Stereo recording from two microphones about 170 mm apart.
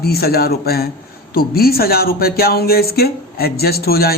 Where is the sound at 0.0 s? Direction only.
65° left (ahead or behind).